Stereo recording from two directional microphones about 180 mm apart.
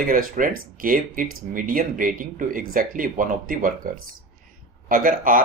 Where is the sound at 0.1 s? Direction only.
50° right (ahead or behind).